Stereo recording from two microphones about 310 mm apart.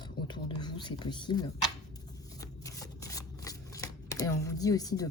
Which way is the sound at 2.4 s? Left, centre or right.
Centre.